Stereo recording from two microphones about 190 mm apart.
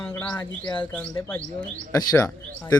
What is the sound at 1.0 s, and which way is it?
Speech, 10° left (ahead or behind).